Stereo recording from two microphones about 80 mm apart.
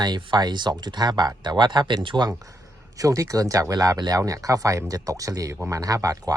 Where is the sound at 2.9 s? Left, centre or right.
Right.